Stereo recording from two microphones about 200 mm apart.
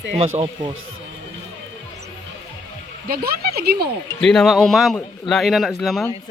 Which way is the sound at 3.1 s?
50° right (ahead or behind).